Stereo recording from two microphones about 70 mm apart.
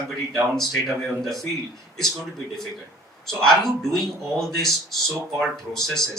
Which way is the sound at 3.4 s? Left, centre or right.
Centre.